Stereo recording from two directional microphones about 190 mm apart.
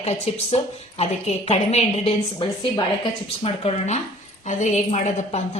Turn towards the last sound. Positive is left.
turn(degrees=35)  # may be behind; listen again after turning